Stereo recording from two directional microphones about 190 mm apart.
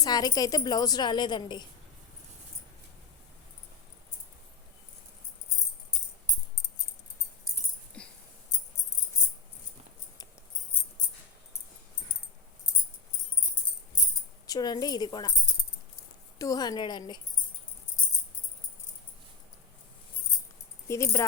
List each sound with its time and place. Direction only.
0.0 s a woman's voice: 20° left (ahead or behind)
8.0 s a sound: 5° left (ahead or behind)
14.4 s speech: 20° left (ahead or behind)
16.4 s a woman's voice: 20° left (ahead or behind)
20.8 s speech: 15° left (ahead or behind)